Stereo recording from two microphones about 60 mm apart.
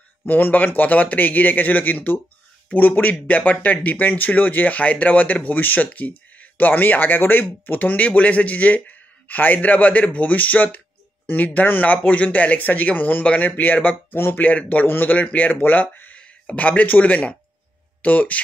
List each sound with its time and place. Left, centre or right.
0.2 s speech: left
14.1 s speech: left
14.4 s speech: left